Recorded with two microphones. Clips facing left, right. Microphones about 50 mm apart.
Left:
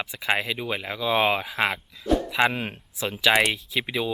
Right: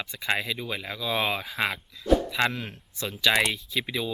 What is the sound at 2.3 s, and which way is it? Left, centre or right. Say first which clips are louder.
Speech: left 4 dB; centre.